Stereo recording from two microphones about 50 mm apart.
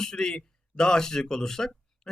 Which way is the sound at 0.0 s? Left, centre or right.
Centre.